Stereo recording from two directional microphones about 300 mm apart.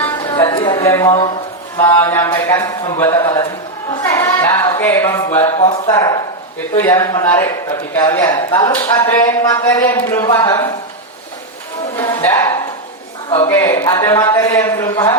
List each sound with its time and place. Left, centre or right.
0.0 s music: centre
1.8 s speech: centre
3.9 s a sound: centre
5.5 s speech: left
11.9 s speech: centre